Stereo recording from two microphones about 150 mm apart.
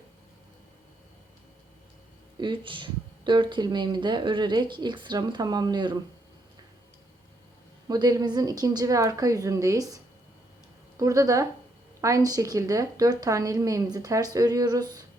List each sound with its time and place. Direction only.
2.4 s speech: 35° right (ahead or behind)
7.9 s a woman's voice: 25° right (ahead or behind)